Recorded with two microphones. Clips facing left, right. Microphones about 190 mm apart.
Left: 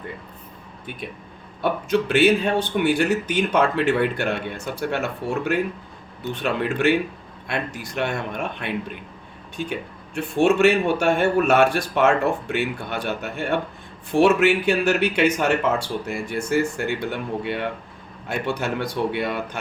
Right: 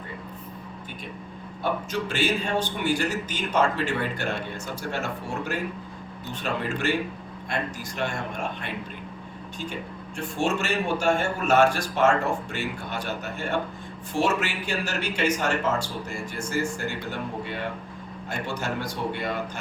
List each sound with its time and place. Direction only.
1.6 s speech: 60° left (ahead or behind)
10.2 s speech: 60° left (ahead or behind)